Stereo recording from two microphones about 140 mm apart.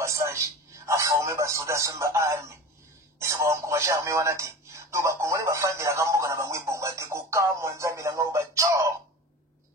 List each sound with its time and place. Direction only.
0.0 s radio: 20° right (ahead or behind)
3.2 s speech: 20° right (ahead or behind)